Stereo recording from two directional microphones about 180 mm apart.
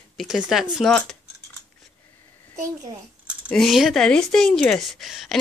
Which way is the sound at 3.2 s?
Centre (ahead or behind).